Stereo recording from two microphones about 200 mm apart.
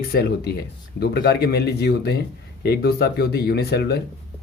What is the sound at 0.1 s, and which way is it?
Speech, 50° left (ahead or behind).